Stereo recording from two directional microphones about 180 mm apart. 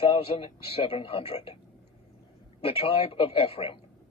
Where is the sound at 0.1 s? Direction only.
30° left (ahead or behind).